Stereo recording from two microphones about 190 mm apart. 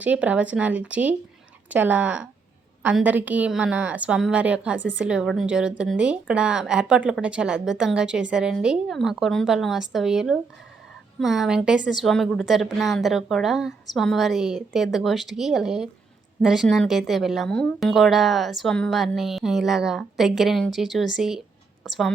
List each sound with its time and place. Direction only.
0.0 s a woman's voice: 5° right (ahead or behind)